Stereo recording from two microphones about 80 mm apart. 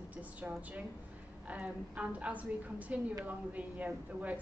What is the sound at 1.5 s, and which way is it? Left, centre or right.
A woman's voice, centre.